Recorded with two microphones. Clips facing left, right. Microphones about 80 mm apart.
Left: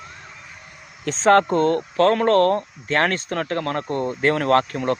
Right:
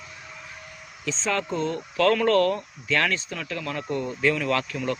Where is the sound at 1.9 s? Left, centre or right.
Left.